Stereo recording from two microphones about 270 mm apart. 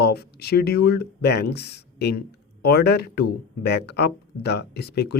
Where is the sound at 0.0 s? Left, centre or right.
Left.